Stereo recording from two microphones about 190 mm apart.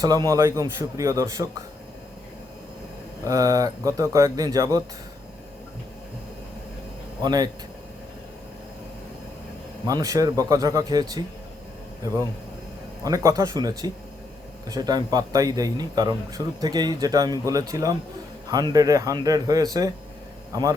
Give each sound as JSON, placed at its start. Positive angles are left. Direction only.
{"t": 0.0, "sound": "a man's voice", "side_deg": -20}
{"t": 3.2, "sound": "a man's voice", "side_deg": -20}
{"t": 7.2, "sound": "a man's voice", "side_deg": -20}
{"t": 9.8, "sound": "a man's voice", "side_deg": -20}
{"t": 13.1, "sound": "a man's voice", "side_deg": -20}